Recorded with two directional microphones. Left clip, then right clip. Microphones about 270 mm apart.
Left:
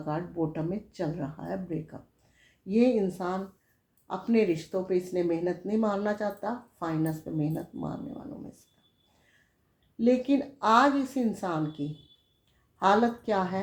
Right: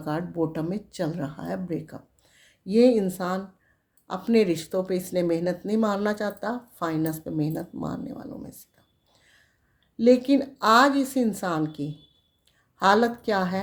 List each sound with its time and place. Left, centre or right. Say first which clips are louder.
0.0 s speech: right 4 dB; right
10.0 s speech: right 6 dB; right